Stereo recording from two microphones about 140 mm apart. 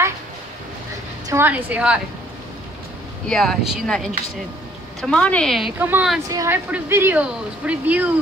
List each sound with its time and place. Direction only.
1.3 s speech: 15° right (ahead or behind)
3.3 s speech: centre (ahead or behind)
5.8 s a woman's voice: 15° right (ahead or behind)